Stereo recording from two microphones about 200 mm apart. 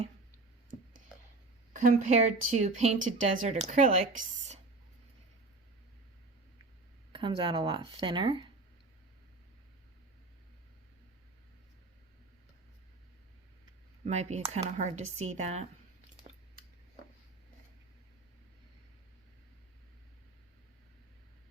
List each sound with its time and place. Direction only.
1.7 s speech: 40° right (ahead or behind)
7.1 s speech: 25° right (ahead or behind)
14.0 s speech: 35° right (ahead or behind)